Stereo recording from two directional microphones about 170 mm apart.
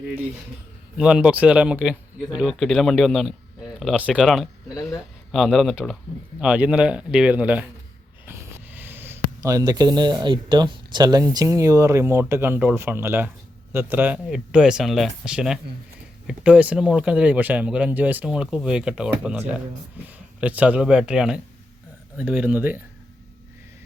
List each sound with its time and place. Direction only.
0.9 s speech: 5° right (ahead or behind)
4.7 s speech: 20° left (ahead or behind)
5.3 s speech: centre (ahead or behind)